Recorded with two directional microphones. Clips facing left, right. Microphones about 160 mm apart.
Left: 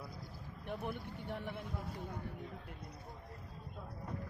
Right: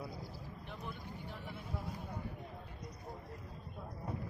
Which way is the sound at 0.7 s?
60° left (ahead or behind).